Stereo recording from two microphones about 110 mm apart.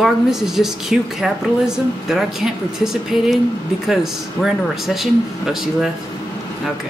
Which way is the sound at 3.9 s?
5° right (ahead or behind).